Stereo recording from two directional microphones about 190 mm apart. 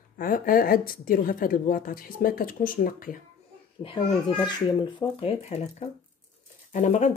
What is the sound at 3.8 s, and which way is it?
A child's voice, 30° left (ahead or behind).